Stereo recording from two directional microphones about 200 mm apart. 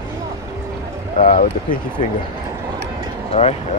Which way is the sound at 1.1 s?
45° left (ahead or behind).